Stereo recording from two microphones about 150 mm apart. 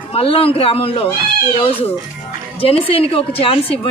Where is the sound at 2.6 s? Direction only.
40° left (ahead or behind).